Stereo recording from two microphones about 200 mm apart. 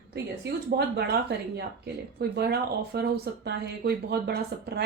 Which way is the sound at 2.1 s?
55° right (ahead or behind).